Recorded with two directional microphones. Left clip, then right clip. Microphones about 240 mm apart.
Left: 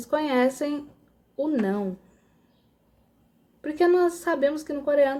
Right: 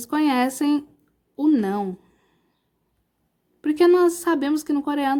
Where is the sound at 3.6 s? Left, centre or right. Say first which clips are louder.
Right 4 dB; right.